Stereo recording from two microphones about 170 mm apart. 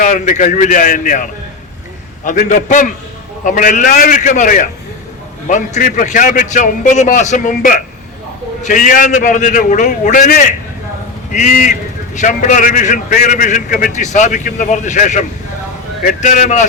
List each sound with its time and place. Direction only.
0.0 s a man's voice: 45° left (ahead or behind)